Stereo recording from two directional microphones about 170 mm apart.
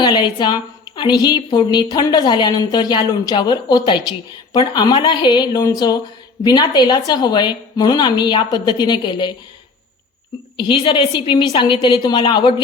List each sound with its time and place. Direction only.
0.0 s a woman's voice: 25° left (ahead or behind)
10.6 s a woman's voice: 30° left (ahead or behind)